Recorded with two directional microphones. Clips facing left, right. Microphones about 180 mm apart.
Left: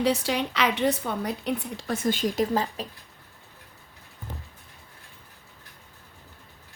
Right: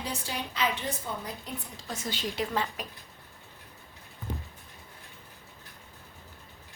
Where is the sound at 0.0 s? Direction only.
75° left (ahead or behind); by 2.8 s 35° left (ahead or behind).